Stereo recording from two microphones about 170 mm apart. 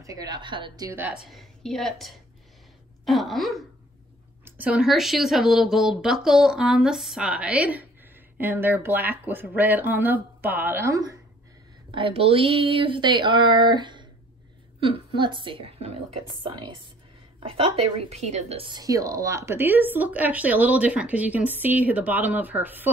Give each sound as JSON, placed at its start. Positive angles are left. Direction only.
{"t": 0.0, "sound": "speech", "side_deg": -20}
{"t": 0.9, "sound": "a woman's voice", "side_deg": -10}
{"t": 11.9, "sound": "a woman's voice", "side_deg": -30}
{"t": 17.9, "sound": "a woman's voice", "side_deg": -35}
{"t": 18.7, "sound": "speech", "side_deg": -20}